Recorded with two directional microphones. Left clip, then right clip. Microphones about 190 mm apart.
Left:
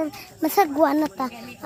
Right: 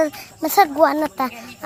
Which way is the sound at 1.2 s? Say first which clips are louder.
Right 5 dB; 5° right (ahead or behind).